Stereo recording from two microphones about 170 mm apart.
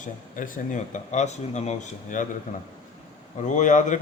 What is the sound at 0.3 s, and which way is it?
A man's voice, 50° left (ahead or behind).